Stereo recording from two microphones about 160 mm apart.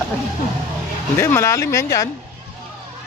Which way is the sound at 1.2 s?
15° left (ahead or behind).